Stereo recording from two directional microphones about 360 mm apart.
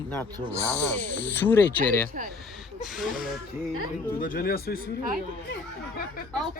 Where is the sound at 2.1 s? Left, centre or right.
Right.